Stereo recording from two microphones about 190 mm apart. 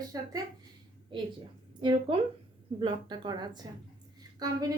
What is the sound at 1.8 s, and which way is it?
A woman's voice, 25° right (ahead or behind).